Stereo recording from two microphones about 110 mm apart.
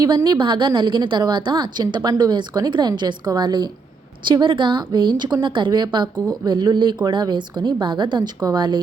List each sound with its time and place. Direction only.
0.0 s a woman's voice: 40° right (ahead or behind)